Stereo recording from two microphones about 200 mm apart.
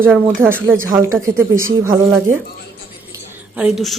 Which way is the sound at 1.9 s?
15° right (ahead or behind).